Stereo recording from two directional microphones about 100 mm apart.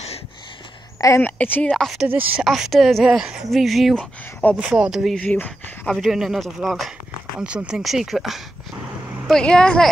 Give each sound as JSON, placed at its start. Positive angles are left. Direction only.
{"t": 1.2, "sound": "speech", "side_deg": 15}
{"t": 4.0, "sound": "speech", "side_deg": 15}
{"t": 4.6, "sound": "speech", "side_deg": -10}
{"t": 5.2, "sound": "speech", "side_deg": 15}
{"t": 5.9, "sound": "speech", "side_deg": -5}
{"t": 7.3, "sound": "speech", "side_deg": -10}
{"t": 9.3, "sound": "speech", "side_deg": 10}